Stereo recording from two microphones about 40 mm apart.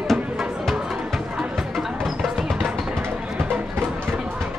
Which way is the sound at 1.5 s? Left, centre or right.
Centre.